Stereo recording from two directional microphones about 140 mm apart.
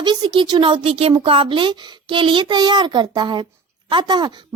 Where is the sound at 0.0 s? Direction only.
35° right (ahead or behind).